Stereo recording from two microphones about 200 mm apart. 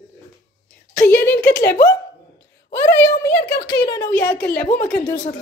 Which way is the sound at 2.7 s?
55° left (ahead or behind).